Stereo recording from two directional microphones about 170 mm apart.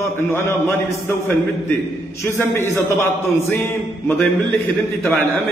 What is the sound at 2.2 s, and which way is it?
A man's voice, 15° left (ahead or behind).